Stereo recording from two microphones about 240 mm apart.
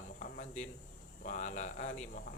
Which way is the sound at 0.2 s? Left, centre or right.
Left.